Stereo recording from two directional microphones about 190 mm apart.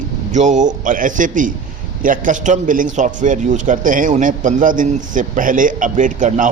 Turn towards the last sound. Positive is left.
turn(degrees=-45)  # may be behind; listen again after turning